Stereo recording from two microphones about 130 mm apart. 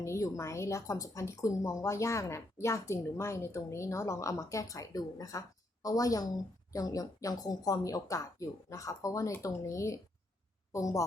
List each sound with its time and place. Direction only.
0.0 s a woman's voice: 25° left (ahead or behind)